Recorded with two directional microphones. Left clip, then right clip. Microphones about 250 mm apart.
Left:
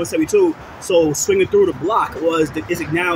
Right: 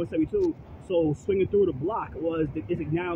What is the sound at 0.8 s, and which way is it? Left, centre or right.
Speech, left.